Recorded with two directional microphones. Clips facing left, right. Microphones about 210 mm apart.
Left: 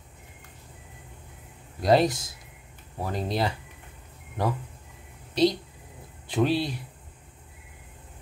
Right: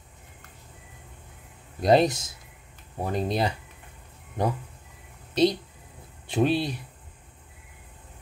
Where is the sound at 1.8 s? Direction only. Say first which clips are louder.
Right 1 dB; 20° right (ahead or behind).